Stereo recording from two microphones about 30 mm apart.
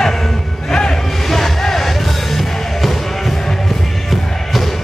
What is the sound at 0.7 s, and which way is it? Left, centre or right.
Music, left.